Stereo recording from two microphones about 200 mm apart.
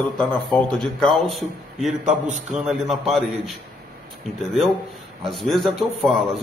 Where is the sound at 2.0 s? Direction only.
35° right (ahead or behind).